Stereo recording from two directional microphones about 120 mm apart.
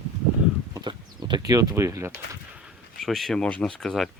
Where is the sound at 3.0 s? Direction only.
Centre (ahead or behind).